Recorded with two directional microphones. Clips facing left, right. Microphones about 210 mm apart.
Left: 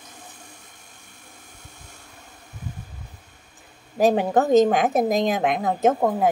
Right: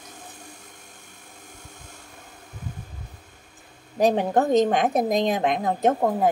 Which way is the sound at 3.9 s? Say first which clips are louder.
Left 2 dB; 5° left (ahead or behind).